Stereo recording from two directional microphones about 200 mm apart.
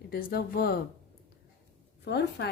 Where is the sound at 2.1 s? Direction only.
55° left (ahead or behind).